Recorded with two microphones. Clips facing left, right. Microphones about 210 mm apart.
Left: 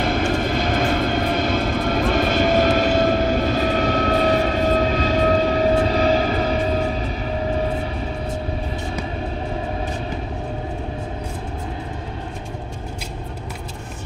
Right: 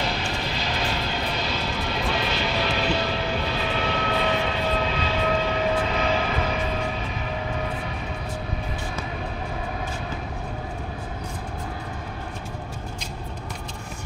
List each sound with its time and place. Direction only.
0.0 s vehicle: 50° left (ahead or behind); by 7.8 s 35° left (ahead or behind)